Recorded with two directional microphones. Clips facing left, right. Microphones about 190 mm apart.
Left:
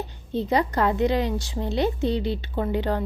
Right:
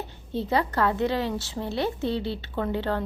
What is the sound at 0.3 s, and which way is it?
A woman's voice, 15° left (ahead or behind).